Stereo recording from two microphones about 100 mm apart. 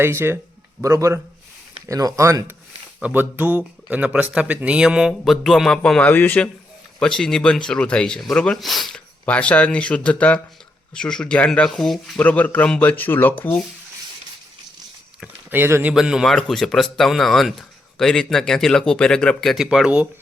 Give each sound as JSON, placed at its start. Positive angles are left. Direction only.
{"t": 0.0, "sound": "speech", "side_deg": -25}
{"t": 3.0, "sound": "speech", "side_deg": -20}
{"t": 7.0, "sound": "speech", "side_deg": 5}
{"t": 9.2, "sound": "speech", "side_deg": 10}
{"t": 12.2, "sound": "speech", "side_deg": 15}
{"t": 15.4, "sound": "speech", "side_deg": -20}
{"t": 16.0, "sound": "speech", "side_deg": -5}